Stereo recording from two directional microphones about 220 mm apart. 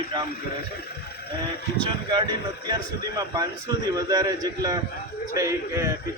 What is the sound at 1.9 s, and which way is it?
A man's voice, 20° right (ahead or behind).